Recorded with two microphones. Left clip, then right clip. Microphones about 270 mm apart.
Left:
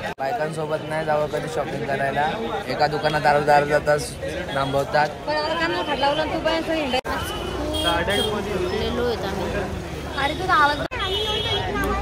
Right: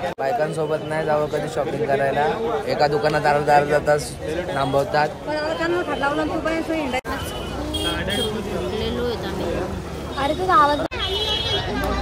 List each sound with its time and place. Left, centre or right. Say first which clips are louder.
0.9 s speech: even; centre
10.2 s a woman's voice: right 2 dB; right